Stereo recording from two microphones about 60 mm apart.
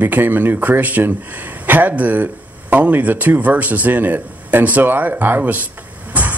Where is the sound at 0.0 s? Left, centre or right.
Right.